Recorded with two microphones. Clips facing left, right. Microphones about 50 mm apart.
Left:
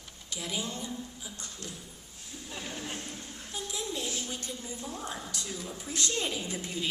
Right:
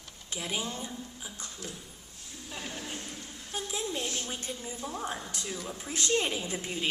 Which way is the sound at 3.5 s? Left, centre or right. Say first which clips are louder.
Right 2 dB; right.